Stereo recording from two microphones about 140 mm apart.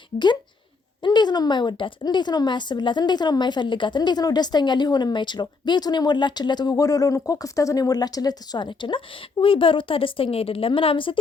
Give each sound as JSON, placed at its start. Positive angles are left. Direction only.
{"t": 1.0, "sound": "a woman's voice", "side_deg": 30}